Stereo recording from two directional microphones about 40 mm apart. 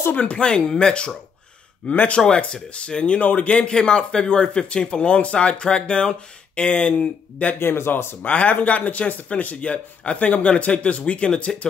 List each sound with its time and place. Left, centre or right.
0.1 s speech: left
0.5 s speech: left
2.1 s speech: left
3.7 s speech: left
7.5 s speech: left
8.2 s speech: left